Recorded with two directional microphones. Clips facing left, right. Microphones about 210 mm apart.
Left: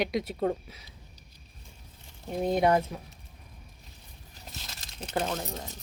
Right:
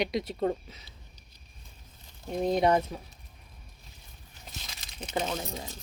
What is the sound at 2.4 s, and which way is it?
Speech, 5° left (ahead or behind).